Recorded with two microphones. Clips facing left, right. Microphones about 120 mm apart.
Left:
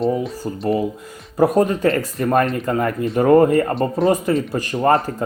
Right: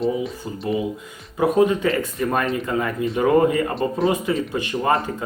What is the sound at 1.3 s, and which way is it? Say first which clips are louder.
Speech: left 2 dB; 40° left (ahead or behind).